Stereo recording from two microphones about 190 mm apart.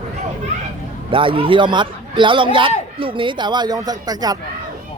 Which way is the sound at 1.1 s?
25° right (ahead or behind).